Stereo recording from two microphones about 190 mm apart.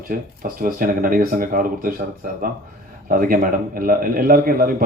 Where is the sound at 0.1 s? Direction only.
50° right (ahead or behind).